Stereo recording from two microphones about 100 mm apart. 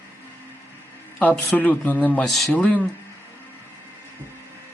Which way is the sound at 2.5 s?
15° left (ahead or behind).